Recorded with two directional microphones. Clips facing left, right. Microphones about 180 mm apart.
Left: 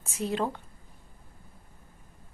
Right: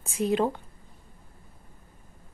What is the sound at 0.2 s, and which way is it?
Speech, 15° right (ahead or behind).